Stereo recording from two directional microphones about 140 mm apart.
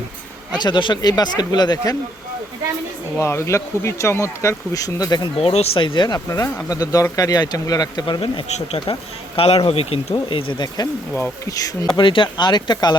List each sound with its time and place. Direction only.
0.6 s speech: 35° left (ahead or behind)
3.2 s speech: 20° left (ahead or behind)
5.4 s speech: 45° left (ahead or behind)
8.4 s speech: 50° left (ahead or behind); by 10.8 s 35° left (ahead or behind)
11.1 s speech: 20° left (ahead or behind)
11.9 s speech: 35° left (ahead or behind)